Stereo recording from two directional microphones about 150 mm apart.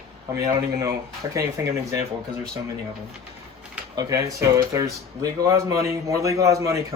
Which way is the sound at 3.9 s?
20° right (ahead or behind).